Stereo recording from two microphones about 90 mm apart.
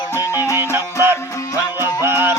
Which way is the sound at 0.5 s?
30° right (ahead or behind).